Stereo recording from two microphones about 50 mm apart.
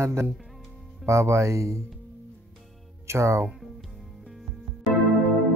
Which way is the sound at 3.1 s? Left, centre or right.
Right.